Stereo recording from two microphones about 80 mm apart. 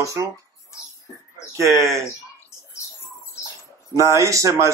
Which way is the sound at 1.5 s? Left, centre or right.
Right.